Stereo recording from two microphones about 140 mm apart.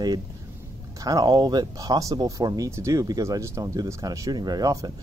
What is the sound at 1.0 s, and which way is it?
Speech, 30° right (ahead or behind).